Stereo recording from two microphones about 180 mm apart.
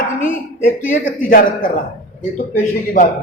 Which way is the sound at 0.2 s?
50° left (ahead or behind).